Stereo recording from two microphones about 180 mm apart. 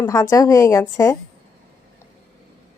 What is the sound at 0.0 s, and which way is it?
A woman's voice, 15° left (ahead or behind).